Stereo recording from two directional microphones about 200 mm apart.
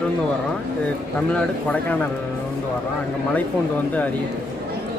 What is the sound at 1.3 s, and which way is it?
Speech, 5° left (ahead or behind).